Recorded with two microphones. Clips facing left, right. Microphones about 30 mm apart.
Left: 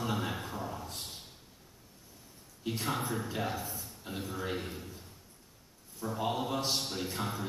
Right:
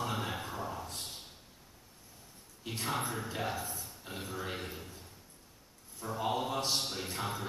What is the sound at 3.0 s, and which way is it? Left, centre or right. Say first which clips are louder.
A man's voice: left 2 dB; centre.